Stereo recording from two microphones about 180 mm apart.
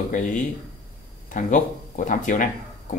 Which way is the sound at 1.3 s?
45° left (ahead or behind).